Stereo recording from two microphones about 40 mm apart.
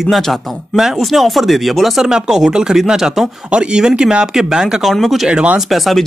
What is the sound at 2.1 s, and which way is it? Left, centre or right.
Speech, centre.